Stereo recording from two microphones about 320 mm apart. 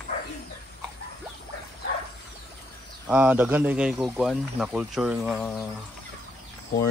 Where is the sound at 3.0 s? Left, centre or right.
Centre.